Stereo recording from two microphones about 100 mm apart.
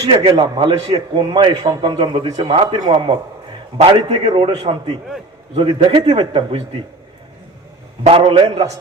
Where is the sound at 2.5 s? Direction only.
70° right (ahead or behind).